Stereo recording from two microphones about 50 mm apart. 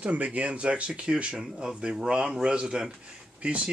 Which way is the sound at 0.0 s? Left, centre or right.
Right.